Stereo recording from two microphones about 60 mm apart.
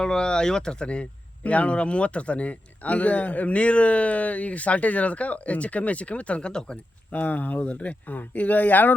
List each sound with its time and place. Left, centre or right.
0.0 s speech: centre
7.1 s speech: left